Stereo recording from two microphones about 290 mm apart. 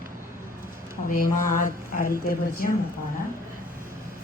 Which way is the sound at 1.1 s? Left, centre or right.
Left.